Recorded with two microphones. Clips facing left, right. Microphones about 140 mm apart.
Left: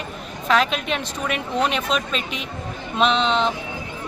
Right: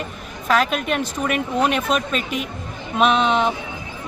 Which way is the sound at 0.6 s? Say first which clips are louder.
Right 3 dB; 50° right (ahead or behind).